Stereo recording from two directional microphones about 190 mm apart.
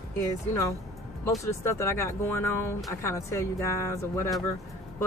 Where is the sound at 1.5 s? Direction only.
15° left (ahead or behind).